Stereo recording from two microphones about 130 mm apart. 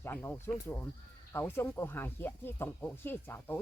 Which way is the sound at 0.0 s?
15° left (ahead or behind).